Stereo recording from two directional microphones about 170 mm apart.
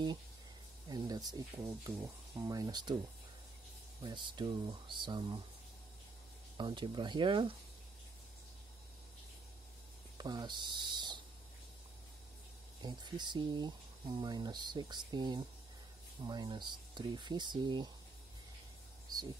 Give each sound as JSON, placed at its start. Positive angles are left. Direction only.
{"t": 0.8, "sound": "speech", "side_deg": -25}
{"t": 4.0, "sound": "speech", "side_deg": -25}
{"t": 6.5, "sound": "speech", "side_deg": -30}
{"t": 10.1, "sound": "speech", "side_deg": -25}
{"t": 12.8, "sound": "speech", "side_deg": -25}